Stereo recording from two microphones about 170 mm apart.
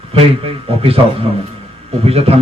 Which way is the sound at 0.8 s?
35° right (ahead or behind).